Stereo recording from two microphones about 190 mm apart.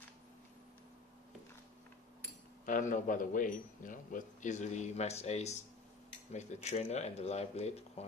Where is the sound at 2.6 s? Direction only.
45° left (ahead or behind).